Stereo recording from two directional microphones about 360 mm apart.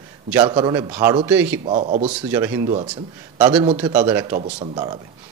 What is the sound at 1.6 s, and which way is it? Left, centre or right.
Speech, centre.